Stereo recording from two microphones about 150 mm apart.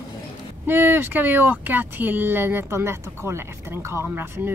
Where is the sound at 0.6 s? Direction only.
15° right (ahead or behind).